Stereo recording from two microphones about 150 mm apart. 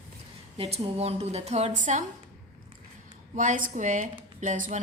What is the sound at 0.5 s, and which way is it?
A woman's voice, 40° right (ahead or behind).